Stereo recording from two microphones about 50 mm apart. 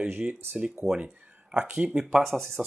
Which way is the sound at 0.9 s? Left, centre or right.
Right.